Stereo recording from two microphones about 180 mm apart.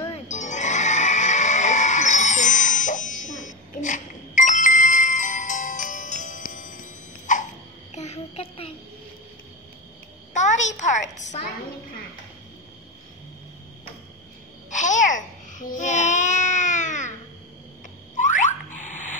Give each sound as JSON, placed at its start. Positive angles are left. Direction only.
{"t": 0.1, "sound": "music", "side_deg": 40}
{"t": 3.3, "sound": "bicycle bell", "side_deg": 45}
{"t": 7.9, "sound": "child singing", "side_deg": 35}
{"t": 10.3, "sound": "a sound", "side_deg": 40}
{"t": 14.7, "sound": "babbling", "side_deg": 45}
{"t": 18.1, "sound": "frog", "side_deg": 45}